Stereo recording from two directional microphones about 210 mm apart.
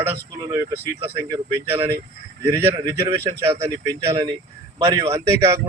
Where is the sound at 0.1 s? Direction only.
10° right (ahead or behind).